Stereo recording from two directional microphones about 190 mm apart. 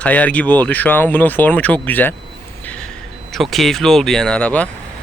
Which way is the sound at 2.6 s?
5° left (ahead or behind).